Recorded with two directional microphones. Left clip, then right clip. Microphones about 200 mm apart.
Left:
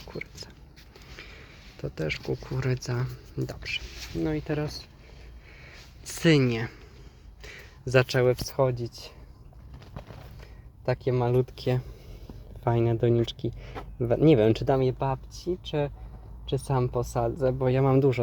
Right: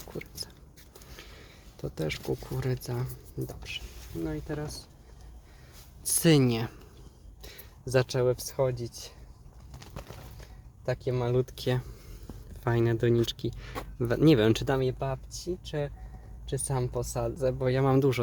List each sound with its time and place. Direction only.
0.0 s a sound: 15° right (ahead or behind)
2.8 s speech: centre (ahead or behind)
3.3 s speech: 15° left (ahead or behind)
4.2 s speech: 35° left (ahead or behind)
6.1 s speech: 10° right (ahead or behind)
7.4 s speech: centre (ahead or behind)
9.8 s bird: 55° right (ahead or behind)
10.8 s speech: 15° left (ahead or behind); by 14.8 s centre (ahead or behind)
14.8 s speech: 15° left (ahead or behind)
16.5 s speech: 15° left (ahead or behind)